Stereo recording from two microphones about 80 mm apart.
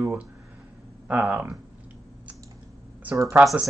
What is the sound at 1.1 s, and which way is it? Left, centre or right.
Speech, centre.